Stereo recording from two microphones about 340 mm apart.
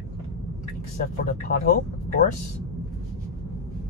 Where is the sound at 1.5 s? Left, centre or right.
Left.